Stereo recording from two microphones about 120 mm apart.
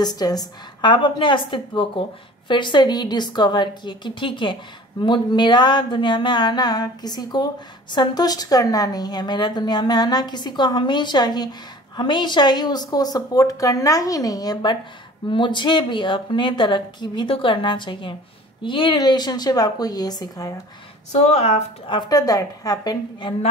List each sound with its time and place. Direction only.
0.0 s a woman's voice: 35° left (ahead or behind)
21.1 s speech: 65° left (ahead or behind)
21.8 s a woman's voice: 35° left (ahead or behind)